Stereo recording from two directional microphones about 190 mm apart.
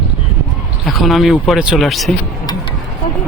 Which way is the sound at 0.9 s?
Centre (ahead or behind).